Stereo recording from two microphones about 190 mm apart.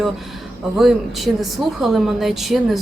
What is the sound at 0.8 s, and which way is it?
Speech, centre (ahead or behind).